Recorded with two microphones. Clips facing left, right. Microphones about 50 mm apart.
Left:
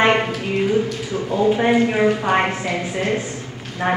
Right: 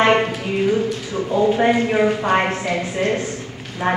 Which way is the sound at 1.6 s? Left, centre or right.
Centre.